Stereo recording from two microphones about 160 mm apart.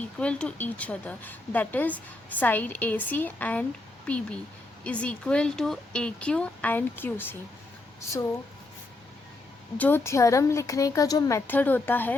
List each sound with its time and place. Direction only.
0.2 s a woman's voice: 5° left (ahead or behind)
9.7 s a woman's voice: 10° left (ahead or behind)